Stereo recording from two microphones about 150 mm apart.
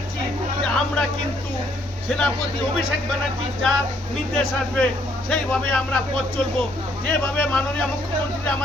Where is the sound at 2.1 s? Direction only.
5° left (ahead or behind).